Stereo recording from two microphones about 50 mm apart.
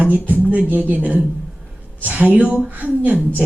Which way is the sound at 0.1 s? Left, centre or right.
Right.